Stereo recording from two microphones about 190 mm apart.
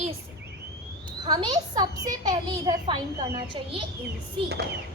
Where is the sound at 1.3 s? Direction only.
20° right (ahead or behind).